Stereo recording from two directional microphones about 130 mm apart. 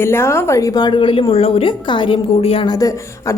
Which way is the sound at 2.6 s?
30° left (ahead or behind).